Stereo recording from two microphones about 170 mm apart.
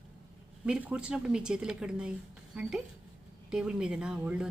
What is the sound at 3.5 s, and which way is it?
A woman's voice, 5° right (ahead or behind).